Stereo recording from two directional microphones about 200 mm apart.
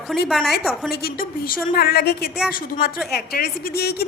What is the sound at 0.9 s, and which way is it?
A woman's voice, 50° left (ahead or behind).